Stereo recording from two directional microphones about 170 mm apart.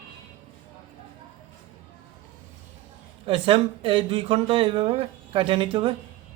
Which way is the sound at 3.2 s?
30° right (ahead or behind).